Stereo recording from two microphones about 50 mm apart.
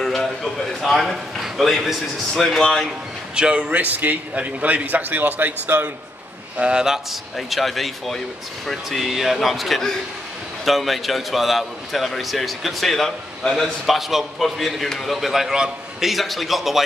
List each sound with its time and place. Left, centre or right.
0.0 s a man's voice: centre
3.3 s a man's voice: centre
3.7 s a man's voice: right
6.6 s a man's voice: centre
7.3 s a man's voice: centre
15.5 s a man's voice: centre
16.1 s a man's voice: centre